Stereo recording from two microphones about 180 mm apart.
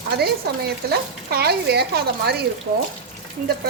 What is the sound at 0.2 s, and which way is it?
A woman's voice, 60° right (ahead or behind).